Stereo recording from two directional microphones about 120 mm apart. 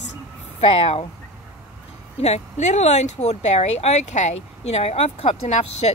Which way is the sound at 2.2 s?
65° left (ahead or behind).